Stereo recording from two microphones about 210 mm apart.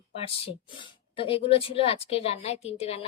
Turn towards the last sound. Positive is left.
turn(degrees=30)  # may be behind; listen again after turning